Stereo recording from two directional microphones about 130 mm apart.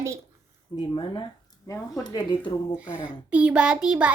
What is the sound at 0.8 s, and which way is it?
Speech, 40° left (ahead or behind).